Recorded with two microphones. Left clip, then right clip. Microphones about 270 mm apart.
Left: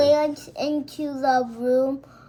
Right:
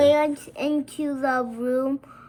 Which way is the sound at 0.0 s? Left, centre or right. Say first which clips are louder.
Even; right.